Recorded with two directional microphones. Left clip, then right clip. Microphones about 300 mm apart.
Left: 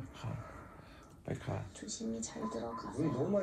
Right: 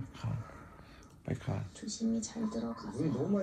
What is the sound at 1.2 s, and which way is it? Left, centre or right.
Speech, right.